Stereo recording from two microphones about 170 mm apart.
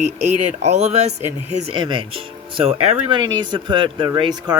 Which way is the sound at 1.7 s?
30° right (ahead or behind).